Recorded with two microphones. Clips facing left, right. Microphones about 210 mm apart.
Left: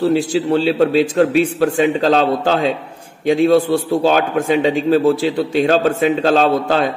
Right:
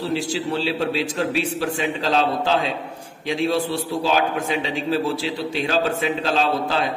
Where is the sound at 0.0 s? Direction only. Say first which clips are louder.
Left 8 dB; 55° left (ahead or behind).